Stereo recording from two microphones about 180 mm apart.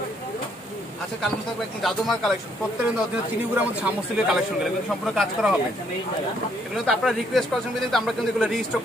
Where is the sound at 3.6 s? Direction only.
5° right (ahead or behind).